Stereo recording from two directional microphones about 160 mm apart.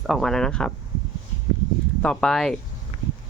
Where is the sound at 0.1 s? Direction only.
Centre (ahead or behind).